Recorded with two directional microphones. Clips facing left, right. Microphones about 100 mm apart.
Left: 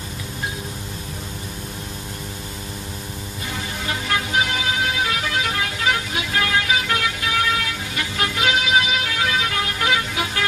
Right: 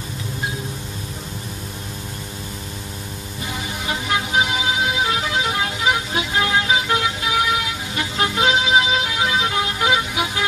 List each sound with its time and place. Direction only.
3.8 s music: 20° right (ahead or behind)